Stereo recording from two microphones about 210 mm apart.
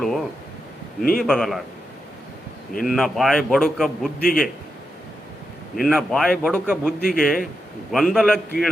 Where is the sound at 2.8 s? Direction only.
Centre (ahead or behind).